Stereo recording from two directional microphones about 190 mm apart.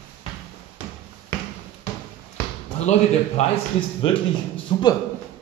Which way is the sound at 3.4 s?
25° left (ahead or behind).